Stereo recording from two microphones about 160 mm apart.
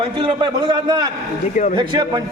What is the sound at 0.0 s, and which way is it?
A man's voice, 30° right (ahead or behind).